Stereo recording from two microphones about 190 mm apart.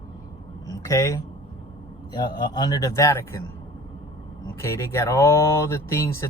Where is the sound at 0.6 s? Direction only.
15° left (ahead or behind).